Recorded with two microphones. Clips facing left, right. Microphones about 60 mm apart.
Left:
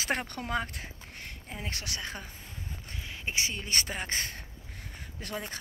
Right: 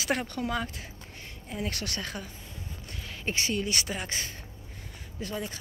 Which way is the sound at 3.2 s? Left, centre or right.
Centre.